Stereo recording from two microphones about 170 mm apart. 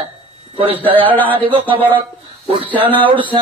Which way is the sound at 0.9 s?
10° left (ahead or behind).